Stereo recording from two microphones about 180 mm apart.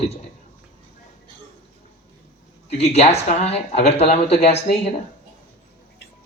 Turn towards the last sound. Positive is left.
turn(degrees=35)  # may be behind; listen again after turning